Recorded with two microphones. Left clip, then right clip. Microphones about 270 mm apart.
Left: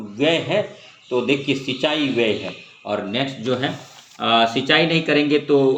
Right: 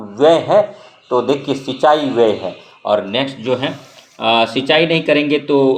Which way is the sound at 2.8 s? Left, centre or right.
Centre.